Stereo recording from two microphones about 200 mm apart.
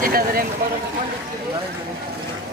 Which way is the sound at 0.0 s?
50° right (ahead or behind).